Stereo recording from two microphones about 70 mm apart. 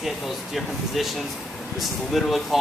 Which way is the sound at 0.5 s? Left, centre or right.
Centre.